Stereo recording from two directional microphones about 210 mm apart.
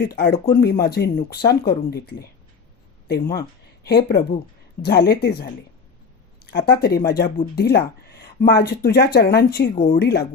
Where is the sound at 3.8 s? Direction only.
50° left (ahead or behind).